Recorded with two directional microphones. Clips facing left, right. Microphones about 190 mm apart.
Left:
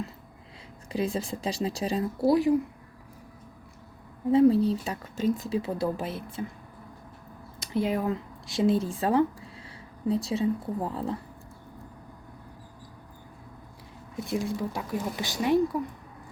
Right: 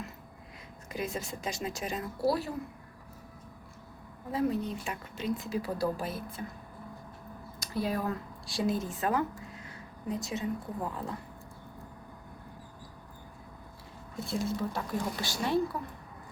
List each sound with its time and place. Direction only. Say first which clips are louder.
0.9 s speech: left 7 dB; 30° left (ahead or behind)
4.3 s speech: left 11 dB; 30° left (ahead or behind)
5.5 s speech: left 3 dB; 25° left (ahead or behind)
7.6 s speech: left 5 dB; 20° left (ahead or behind)
14.3 s a woman's voice: left 3 dB; 15° left (ahead or behind)